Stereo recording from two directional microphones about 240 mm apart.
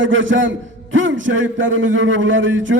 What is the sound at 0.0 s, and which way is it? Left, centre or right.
A man's voice, right.